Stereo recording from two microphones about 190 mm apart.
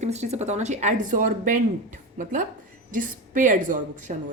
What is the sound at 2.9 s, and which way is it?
A woman's voice, 45° right (ahead or behind).